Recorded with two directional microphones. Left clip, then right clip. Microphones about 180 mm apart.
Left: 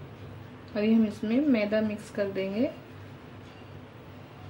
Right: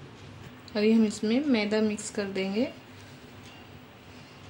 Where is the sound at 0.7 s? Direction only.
55° right (ahead or behind).